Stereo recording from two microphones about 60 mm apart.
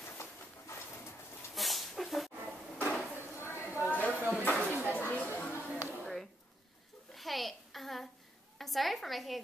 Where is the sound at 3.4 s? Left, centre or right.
Left.